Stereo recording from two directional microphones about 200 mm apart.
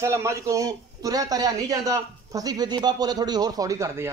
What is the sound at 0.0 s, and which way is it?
A man's voice, 15° right (ahead or behind).